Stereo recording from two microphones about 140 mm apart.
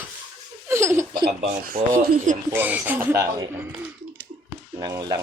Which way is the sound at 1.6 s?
80° right.